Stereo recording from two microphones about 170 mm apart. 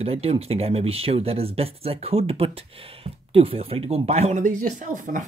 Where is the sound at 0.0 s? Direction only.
35° right (ahead or behind).